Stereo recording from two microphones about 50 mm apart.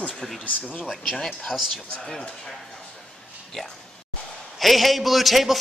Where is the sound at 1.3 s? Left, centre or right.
Centre.